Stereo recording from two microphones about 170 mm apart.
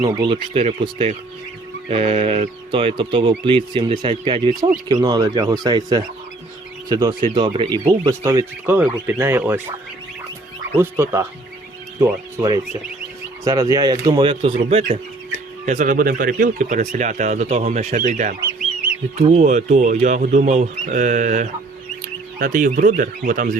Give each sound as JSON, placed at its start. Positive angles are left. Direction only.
{"t": 0.1, "sound": "speech", "side_deg": -30}
{"t": 7.7, "sound": "speech", "side_deg": -20}
{"t": 10.8, "sound": "speech", "side_deg": -15}